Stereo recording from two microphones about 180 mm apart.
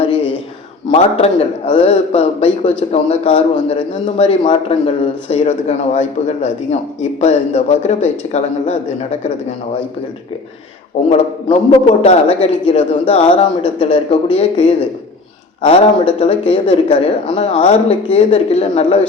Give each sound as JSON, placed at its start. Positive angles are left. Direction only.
{"t": 0.9, "sound": "a man's voice", "side_deg": 35}
{"t": 11.1, "sound": "a man's voice", "side_deg": 35}